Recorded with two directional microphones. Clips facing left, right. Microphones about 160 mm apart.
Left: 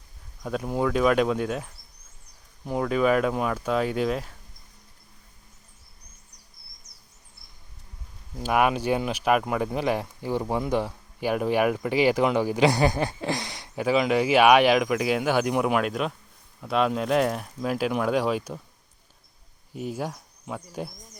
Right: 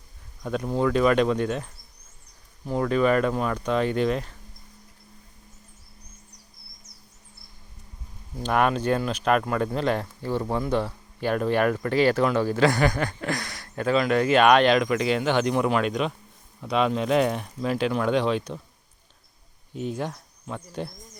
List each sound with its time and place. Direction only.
0.4 s speech: 5° left (ahead or behind)
8.4 s speech: 10° left (ahead or behind)
19.7 s speech: 5° left (ahead or behind)